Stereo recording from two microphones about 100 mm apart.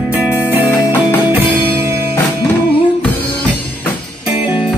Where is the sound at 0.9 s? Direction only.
15° right (ahead or behind).